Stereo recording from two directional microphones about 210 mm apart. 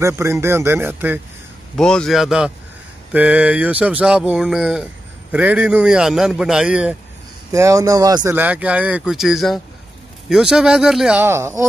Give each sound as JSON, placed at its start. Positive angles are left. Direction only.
{"t": 0.0, "sound": "speech", "side_deg": -10}
{"t": 1.8, "sound": "a man's voice", "side_deg": 5}